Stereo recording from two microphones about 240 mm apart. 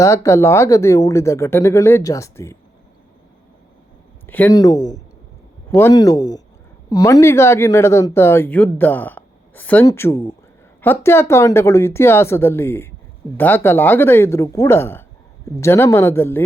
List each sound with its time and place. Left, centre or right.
0.0 s speech: centre
4.3 s speech: centre